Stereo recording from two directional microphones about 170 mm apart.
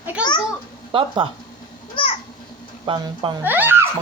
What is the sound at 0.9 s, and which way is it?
Speech, 30° right (ahead or behind).